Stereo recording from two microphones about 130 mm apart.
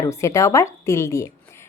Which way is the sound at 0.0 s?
25° left (ahead or behind).